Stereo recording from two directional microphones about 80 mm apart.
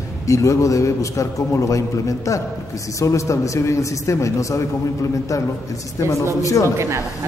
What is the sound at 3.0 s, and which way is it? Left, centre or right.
A man's voice, left.